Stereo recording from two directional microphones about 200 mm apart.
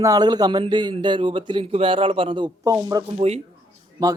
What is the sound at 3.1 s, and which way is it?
Speech, 30° right (ahead or behind).